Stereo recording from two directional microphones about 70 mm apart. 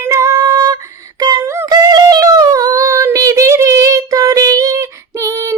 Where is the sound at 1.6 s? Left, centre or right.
Right.